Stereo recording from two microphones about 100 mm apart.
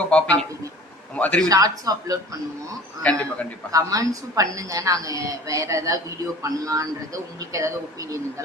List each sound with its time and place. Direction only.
0.0 s a man's voice: 10° left (ahead or behind)
1.5 s a woman's voice: 35° right (ahead or behind)
3.1 s a man's voice: 10° left (ahead or behind)
3.7 s a woman's voice: 35° right (ahead or behind)